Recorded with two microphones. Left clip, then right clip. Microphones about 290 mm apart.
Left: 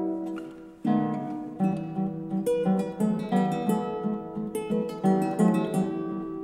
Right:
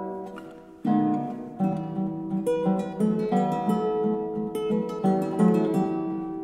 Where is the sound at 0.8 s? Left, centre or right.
Centre.